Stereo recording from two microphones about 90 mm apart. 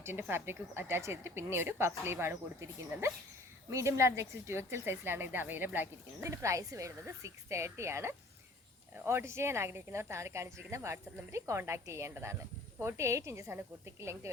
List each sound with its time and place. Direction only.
0.0 s speech: 25° right (ahead or behind)
6.2 s speech: 35° right (ahead or behind)